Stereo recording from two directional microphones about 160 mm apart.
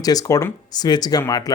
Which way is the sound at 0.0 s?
25° left (ahead or behind).